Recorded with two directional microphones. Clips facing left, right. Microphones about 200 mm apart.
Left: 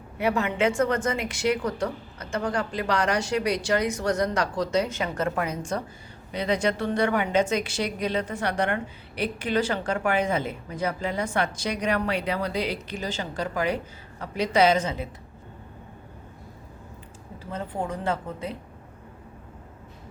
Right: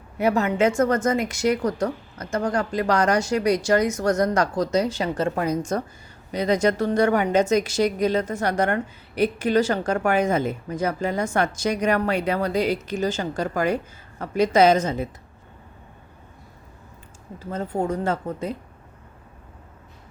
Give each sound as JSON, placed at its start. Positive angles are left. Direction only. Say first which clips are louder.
{"t": 0.2, "sound": "a woman's voice", "louder": "right 4 dB", "side_deg": -40}
{"t": 17.5, "sound": "a woman's voice", "louder": "right 6 dB", "side_deg": -45}